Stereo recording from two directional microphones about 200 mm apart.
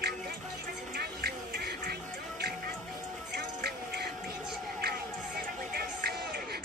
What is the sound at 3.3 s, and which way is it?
Music, 55° right (ahead or behind).